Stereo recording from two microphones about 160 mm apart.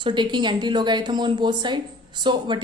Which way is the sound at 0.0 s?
30° right (ahead or behind).